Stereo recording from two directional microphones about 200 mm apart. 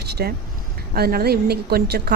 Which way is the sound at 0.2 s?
50° right (ahead or behind).